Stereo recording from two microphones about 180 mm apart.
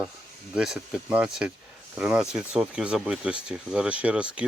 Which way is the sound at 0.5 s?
5° right (ahead or behind).